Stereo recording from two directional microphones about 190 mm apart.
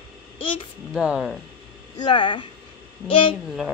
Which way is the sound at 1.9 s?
25° left (ahead or behind).